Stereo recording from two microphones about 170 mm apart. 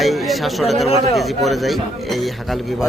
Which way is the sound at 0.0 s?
Centre (ahead or behind).